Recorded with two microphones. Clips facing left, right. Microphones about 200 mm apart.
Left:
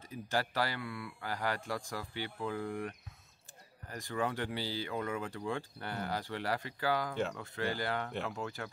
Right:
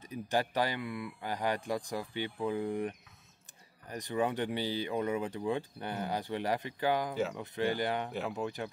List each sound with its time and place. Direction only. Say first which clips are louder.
0.0 s speech: right 3 dB; 20° right (ahead or behind)